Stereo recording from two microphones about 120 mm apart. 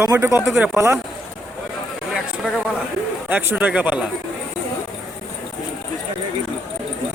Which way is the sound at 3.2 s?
15° right (ahead or behind).